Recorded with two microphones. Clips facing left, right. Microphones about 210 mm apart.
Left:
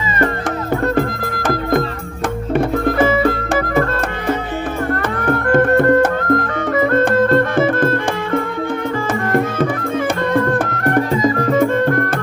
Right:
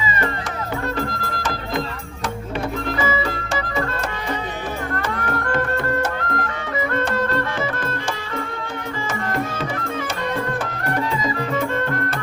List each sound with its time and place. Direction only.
0.9 s music: 50° left (ahead or behind)
4.9 s music: 55° left (ahead or behind)
10.8 s music: 55° left (ahead or behind)